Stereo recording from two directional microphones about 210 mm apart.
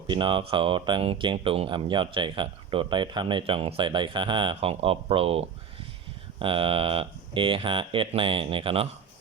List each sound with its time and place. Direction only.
0.1 s speech: 25° right (ahead or behind)